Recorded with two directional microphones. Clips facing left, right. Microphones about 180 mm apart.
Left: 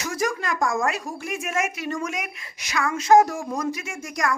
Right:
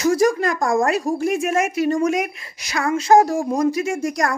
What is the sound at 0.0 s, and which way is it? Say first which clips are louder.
A woman's voice: right 10 dB; 35° right (ahead or behind).